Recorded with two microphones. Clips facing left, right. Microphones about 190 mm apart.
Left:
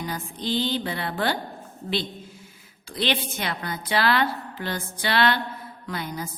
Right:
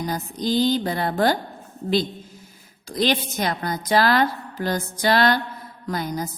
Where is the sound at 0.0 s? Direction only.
40° right (ahead or behind).